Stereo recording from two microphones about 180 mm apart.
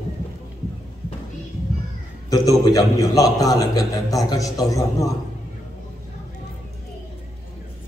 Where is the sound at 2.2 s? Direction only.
20° left (ahead or behind).